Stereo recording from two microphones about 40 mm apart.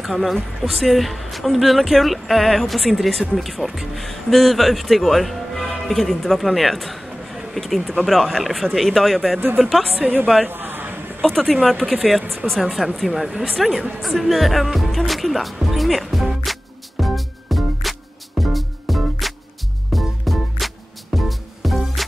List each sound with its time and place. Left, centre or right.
0.0 s speech: centre
10.5 s a sound: right
11.1 s speech: centre
12.0 s speech: centre
17.0 s music: centre